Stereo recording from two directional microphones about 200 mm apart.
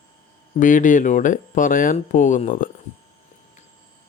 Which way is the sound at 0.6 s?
40° left (ahead or behind).